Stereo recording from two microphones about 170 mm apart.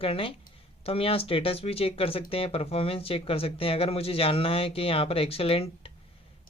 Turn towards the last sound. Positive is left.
turn(degrees=35)  # may be behind; listen again after turning